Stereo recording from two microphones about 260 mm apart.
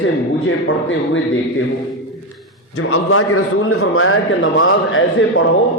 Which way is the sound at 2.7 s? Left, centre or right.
Left.